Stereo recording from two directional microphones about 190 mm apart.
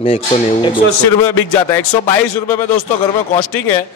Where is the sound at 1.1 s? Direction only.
10° left (ahead or behind).